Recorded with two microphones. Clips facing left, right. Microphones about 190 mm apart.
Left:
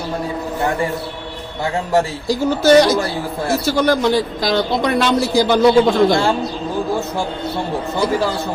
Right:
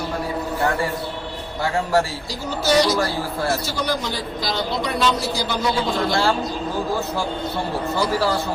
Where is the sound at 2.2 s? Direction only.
50° left (ahead or behind).